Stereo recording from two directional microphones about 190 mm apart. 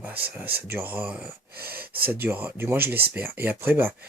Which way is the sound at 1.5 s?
55° right (ahead or behind).